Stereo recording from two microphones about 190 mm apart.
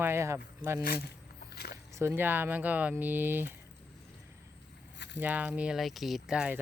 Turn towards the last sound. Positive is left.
turn(degrees=-5)  # may be behind; listen again after turning